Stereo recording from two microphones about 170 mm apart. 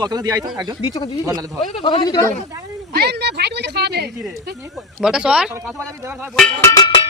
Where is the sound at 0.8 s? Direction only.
25° left (ahead or behind).